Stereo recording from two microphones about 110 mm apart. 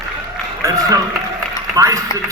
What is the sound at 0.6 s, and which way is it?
A man's voice, 30° right (ahead or behind).